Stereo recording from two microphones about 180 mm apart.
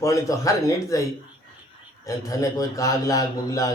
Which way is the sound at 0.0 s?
20° left (ahead or behind).